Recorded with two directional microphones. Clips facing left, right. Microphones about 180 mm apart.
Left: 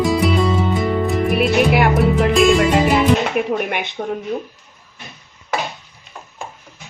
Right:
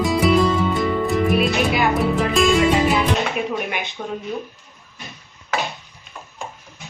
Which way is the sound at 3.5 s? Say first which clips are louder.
Left 4 dB; 60° left (ahead or behind).